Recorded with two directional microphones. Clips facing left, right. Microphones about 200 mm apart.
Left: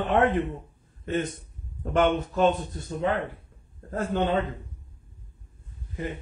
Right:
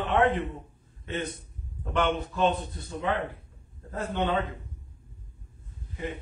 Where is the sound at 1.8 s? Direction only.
45° left (ahead or behind).